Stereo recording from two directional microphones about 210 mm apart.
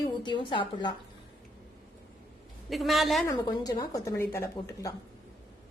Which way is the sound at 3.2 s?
20° left (ahead or behind).